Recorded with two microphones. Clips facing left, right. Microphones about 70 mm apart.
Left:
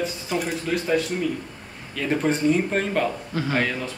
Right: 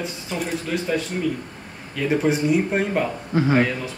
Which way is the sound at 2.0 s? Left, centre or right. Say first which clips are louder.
Right 1 dB; centre.